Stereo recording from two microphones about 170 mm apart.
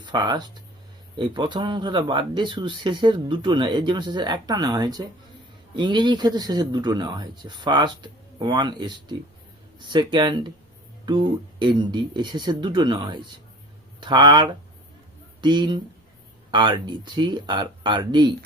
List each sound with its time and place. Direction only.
0.0 s speech: 25° right (ahead or behind)